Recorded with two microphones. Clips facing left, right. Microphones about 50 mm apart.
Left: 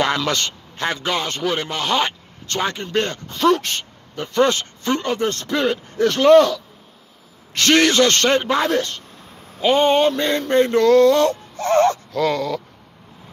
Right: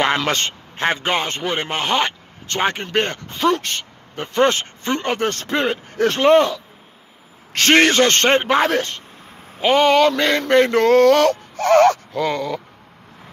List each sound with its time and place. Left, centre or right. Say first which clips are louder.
0.0 s a man's voice: right 1 dB; right
1.3 s speech: left 1 dB; centre
1.7 s a man's voice: right 1 dB; right
3.3 s speech: left 2 dB; centre
4.1 s a man's voice: even; right
5.0 s speech: even; right
5.5 s a man's voice: left 1 dB; right
5.9 s a sound: even; right
6.1 s a man's voice: left 2 dB; right
7.5 s a man's voice: right 1 dB; right
9.8 s a sound: right 3 dB; right
10.8 s speech: left 1 dB; right
12.1 s speech: left 1 dB; centre